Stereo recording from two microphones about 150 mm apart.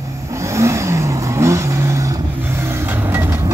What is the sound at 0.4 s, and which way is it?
Vehicle, 20° right (ahead or behind).